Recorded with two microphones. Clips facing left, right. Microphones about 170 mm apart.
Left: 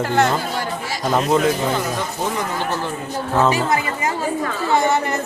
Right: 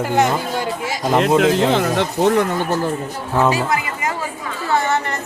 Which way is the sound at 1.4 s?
90° right.